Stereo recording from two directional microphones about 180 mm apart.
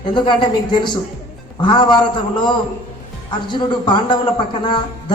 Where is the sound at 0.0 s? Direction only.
25° left (ahead or behind).